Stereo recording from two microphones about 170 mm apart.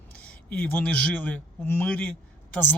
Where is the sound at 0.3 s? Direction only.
10° left (ahead or behind).